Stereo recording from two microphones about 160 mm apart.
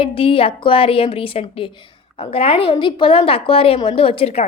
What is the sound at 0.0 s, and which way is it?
A woman's voice, 35° left (ahead or behind).